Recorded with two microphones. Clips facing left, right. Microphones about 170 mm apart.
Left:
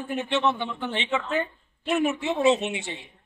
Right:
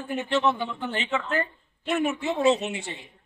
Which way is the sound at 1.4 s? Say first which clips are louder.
Even; 5° left (ahead or behind).